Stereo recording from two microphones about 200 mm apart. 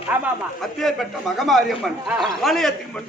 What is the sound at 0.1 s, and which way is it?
Speech, 5° right (ahead or behind).